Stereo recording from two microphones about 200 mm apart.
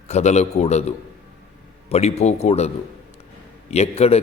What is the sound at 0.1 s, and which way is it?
Speech, 35° left (ahead or behind).